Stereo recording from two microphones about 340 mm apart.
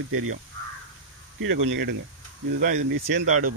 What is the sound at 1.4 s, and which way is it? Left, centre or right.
Speech, right.